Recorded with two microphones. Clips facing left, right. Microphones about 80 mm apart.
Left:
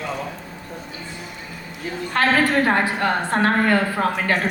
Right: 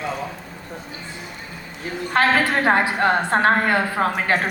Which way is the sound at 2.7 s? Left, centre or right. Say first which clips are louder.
Right 2 dB; right.